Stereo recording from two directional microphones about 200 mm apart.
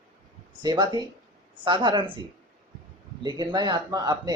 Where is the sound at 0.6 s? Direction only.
20° right (ahead or behind).